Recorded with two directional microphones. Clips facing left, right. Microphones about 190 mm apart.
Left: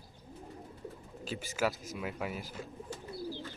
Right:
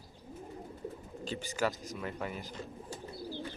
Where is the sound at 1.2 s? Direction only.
5° left (ahead or behind).